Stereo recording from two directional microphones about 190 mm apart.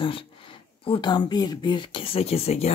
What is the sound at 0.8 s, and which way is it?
Speech, 25° left (ahead or behind).